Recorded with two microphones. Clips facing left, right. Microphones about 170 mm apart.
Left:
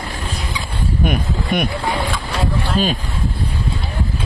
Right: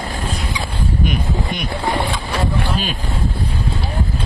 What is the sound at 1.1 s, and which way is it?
Speech, 55° left (ahead or behind).